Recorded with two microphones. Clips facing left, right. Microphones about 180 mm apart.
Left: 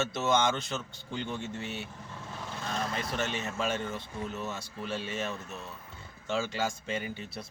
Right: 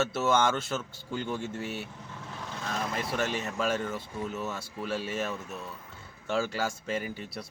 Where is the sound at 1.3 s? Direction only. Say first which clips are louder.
Right 3 dB; centre (ahead or behind).